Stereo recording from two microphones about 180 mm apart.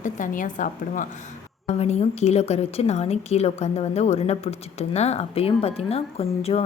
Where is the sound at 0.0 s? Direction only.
45° left (ahead or behind).